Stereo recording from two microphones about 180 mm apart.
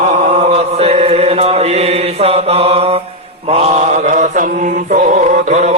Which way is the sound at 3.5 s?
35° right (ahead or behind).